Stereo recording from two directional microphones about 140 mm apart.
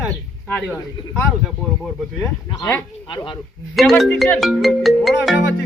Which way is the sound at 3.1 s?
35° left (ahead or behind).